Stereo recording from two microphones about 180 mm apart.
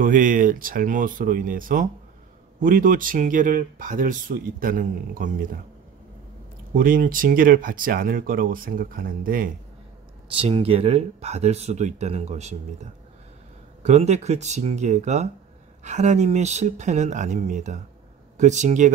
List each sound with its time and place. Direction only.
0.0 s speech: 45° right (ahead or behind)
6.7 s speech: 50° right (ahead or behind)
10.3 s speech: 30° right (ahead or behind)
13.8 s speech: 40° right (ahead or behind)